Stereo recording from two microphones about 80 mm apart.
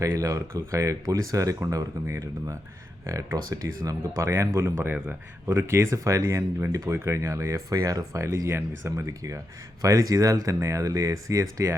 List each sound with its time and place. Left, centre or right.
0.0 s speech: right
4.3 s speech: right